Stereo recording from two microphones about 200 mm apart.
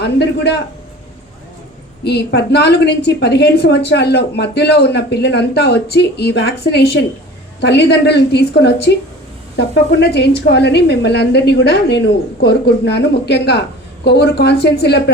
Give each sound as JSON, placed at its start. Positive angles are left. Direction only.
{"t": 0.0, "sound": "a woman's voice", "side_deg": 55}
{"t": 2.0, "sound": "a woman's voice", "side_deg": 55}